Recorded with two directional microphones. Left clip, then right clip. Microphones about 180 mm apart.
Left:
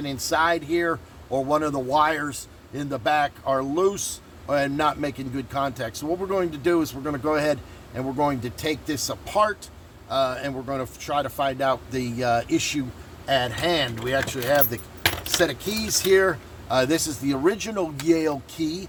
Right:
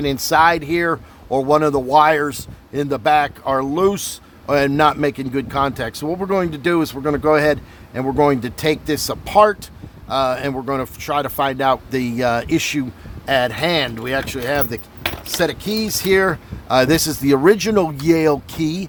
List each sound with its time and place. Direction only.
0.0 s speech: 50° right (ahead or behind)